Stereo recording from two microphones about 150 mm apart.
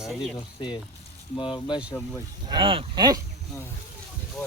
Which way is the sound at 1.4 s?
35° left (ahead or behind).